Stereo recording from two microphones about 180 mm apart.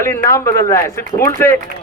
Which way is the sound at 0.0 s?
15° left (ahead or behind).